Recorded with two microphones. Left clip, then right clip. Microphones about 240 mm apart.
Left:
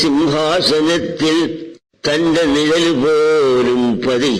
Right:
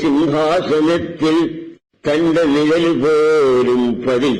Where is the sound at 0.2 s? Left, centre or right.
Left.